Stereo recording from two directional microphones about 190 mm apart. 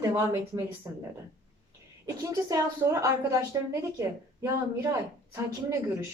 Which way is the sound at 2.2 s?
20° right (ahead or behind).